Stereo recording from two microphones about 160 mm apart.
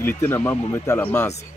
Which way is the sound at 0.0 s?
15° left (ahead or behind).